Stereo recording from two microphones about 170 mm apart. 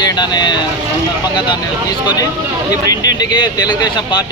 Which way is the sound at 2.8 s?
25° left (ahead or behind).